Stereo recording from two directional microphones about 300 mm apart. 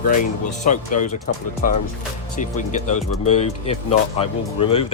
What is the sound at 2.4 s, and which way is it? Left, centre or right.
Speech, left.